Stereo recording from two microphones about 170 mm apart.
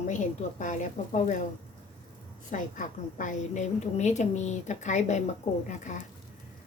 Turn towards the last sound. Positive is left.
turn(degrees=45)  # may be behind; listen again after turning